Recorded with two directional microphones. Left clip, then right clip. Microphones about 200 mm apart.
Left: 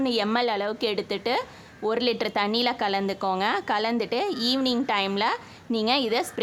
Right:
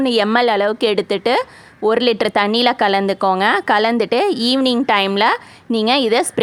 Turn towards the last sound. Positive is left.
turn(degrees=-35)  # may be behind; listen again after turning